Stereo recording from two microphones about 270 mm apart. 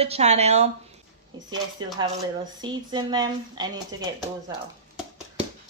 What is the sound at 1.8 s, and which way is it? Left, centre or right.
Speech, centre.